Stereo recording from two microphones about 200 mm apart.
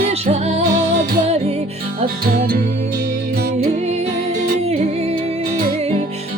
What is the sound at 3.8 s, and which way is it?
Music, 30° right (ahead or behind).